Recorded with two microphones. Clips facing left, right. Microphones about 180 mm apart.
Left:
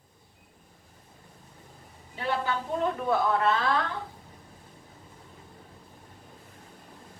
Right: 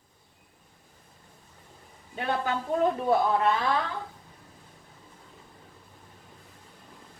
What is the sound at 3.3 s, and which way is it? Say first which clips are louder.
Speech: even; 15° right (ahead or behind).